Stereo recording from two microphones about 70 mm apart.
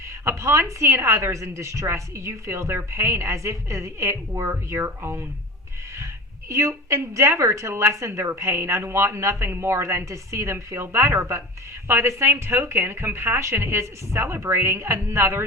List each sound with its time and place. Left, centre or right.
0.3 s a woman's voice: right
6.5 s a woman's voice: right